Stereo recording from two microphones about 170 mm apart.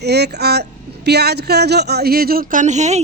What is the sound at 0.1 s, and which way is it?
A man's voice, 75° right (ahead or behind).